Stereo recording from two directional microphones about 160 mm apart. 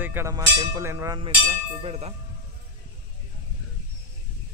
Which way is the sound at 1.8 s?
40° right (ahead or behind).